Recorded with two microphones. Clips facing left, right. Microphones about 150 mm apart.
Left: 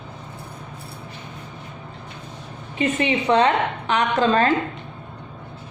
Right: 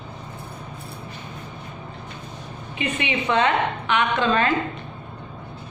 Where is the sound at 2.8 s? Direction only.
40° left (ahead or behind).